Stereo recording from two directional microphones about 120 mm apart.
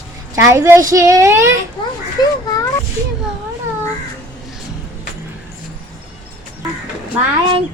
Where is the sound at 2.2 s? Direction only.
35° left (ahead or behind).